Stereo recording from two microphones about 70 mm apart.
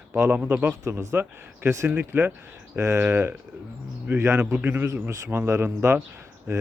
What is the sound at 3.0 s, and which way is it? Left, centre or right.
Speech, right.